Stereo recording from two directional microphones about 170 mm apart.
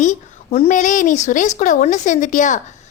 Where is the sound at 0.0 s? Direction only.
40° left (ahead or behind).